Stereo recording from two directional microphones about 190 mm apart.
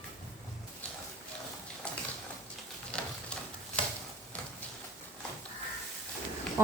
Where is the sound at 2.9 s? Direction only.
5° left (ahead or behind).